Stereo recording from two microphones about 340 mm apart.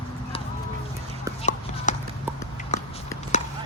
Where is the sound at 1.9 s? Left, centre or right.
Left.